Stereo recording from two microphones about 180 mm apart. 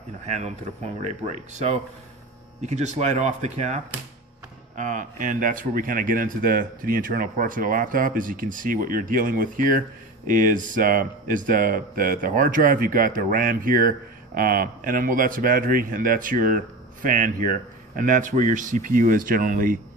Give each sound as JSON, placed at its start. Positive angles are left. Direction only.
{"t": 0.3, "sound": "speech", "side_deg": -40}
{"t": 4.8, "sound": "speech", "side_deg": -45}